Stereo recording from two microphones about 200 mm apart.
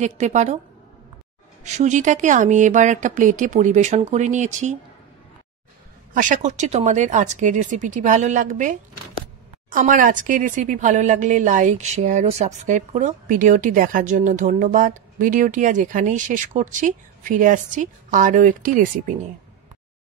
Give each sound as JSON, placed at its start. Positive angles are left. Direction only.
{"t": 0.0, "sound": "a woman's voice", "side_deg": -35}
{"t": 1.6, "sound": "a woman's voice", "side_deg": -35}
{"t": 6.1, "sound": "a woman's voice", "side_deg": -40}